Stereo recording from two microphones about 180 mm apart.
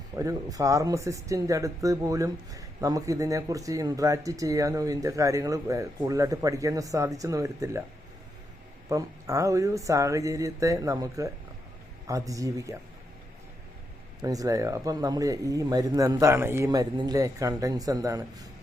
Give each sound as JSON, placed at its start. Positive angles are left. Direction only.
{"t": 0.2, "sound": "speech", "side_deg": -20}
{"t": 8.9, "sound": "speech", "side_deg": -15}
{"t": 14.2, "sound": "speech", "side_deg": -20}